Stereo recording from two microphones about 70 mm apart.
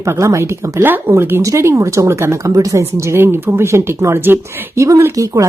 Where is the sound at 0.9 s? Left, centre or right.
Right.